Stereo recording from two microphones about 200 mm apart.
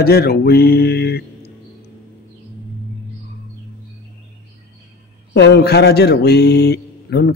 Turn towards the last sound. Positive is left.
turn(degrees=55)  # may be behind; listen again after turning